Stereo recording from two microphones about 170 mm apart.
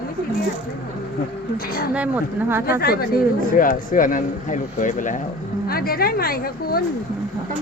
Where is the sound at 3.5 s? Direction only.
55° left (ahead or behind).